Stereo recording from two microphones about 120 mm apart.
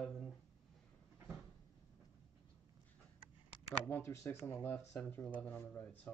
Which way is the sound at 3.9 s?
20° left (ahead or behind).